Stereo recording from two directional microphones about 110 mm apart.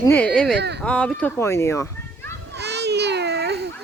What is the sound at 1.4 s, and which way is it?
Children playing, 25° left (ahead or behind).